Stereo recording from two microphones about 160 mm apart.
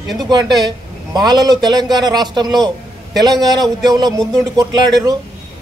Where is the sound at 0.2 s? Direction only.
25° right (ahead or behind).